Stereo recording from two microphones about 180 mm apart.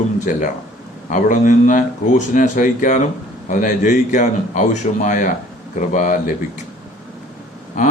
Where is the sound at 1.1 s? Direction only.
45° left (ahead or behind).